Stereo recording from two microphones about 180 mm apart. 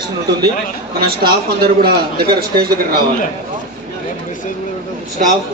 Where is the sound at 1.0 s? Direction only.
60° right (ahead or behind).